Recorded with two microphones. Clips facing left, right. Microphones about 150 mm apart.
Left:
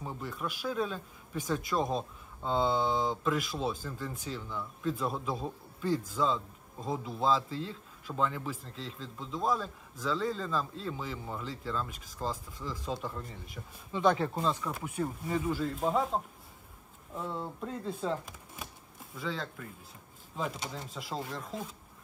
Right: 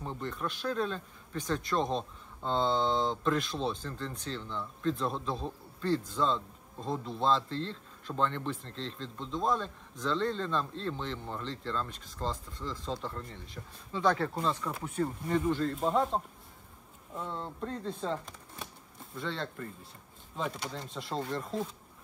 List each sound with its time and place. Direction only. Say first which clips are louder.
0.0 s speech: right 1 dB; 5° left (ahead or behind)
14.3 s speech: left 1 dB; 5° left (ahead or behind)